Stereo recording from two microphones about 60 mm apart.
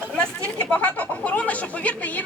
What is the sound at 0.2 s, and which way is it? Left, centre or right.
Chatter, left.